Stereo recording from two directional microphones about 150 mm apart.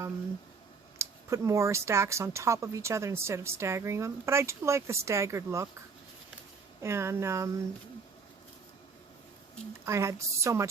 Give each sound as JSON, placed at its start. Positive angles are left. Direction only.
{"t": 0.9, "sound": "speech", "side_deg": -20}
{"t": 6.8, "sound": "speech", "side_deg": -15}
{"t": 9.8, "sound": "speech", "side_deg": -20}